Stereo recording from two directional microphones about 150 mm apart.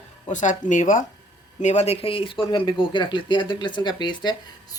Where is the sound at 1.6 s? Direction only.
45° left (ahead or behind).